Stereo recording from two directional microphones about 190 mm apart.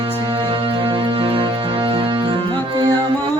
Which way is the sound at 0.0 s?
30° right (ahead or behind).